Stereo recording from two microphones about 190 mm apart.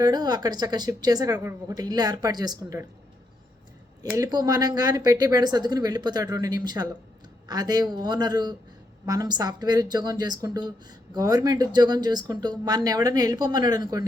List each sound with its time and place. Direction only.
0.0 s speech: 20° right (ahead or behind)
4.2 s speech: 20° right (ahead or behind)